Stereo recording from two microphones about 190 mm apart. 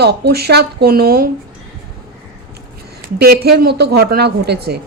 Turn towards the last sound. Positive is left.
turn(degrees=-60)  # may be behind; listen again after turning